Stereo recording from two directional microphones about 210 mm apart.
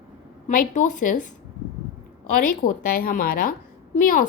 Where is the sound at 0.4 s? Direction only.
40° left (ahead or behind).